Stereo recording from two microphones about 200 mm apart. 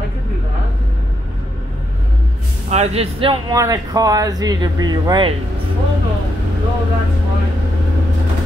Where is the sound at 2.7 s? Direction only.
30° right (ahead or behind).